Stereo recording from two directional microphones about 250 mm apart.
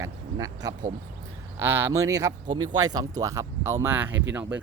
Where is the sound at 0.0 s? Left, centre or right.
Centre.